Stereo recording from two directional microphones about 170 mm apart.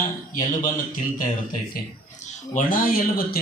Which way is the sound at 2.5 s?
55° left (ahead or behind).